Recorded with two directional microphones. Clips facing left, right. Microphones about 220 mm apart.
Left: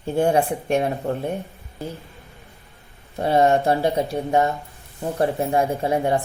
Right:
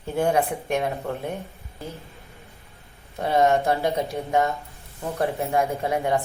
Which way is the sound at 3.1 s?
30° left (ahead or behind).